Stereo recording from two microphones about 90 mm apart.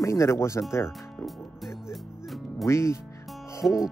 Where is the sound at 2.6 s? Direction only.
30° left (ahead or behind).